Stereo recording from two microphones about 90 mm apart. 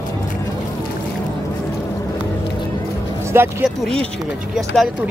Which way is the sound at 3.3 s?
30° right (ahead or behind).